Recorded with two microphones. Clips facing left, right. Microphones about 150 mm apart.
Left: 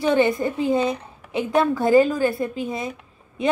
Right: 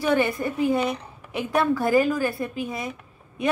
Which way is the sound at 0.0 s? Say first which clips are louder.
Left 3 dB; 20° left (ahead or behind).